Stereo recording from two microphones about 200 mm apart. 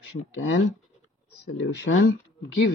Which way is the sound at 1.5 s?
75° left (ahead or behind).